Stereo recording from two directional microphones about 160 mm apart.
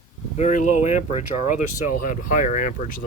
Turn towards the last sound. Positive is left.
turn(degrees=60)  # may be behind; listen again after turning